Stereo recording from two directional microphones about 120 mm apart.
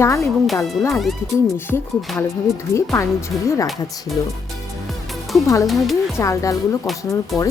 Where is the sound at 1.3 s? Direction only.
20° left (ahead or behind).